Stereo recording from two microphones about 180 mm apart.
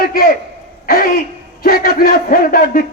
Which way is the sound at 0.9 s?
55° left (ahead or behind).